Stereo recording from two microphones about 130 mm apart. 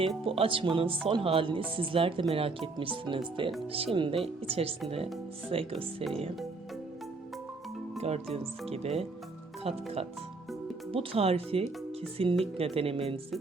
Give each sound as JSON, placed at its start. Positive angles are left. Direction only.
{"t": 0.3, "sound": "speech", "side_deg": -45}
{"t": 7.9, "sound": "speech", "side_deg": -55}